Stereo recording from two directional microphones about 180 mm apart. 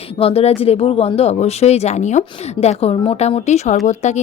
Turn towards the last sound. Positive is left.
turn(degrees=40)  # may be behind; listen again after turning